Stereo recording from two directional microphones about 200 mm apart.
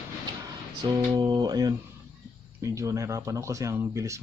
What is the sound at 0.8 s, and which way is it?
Speech, 20° right (ahead or behind).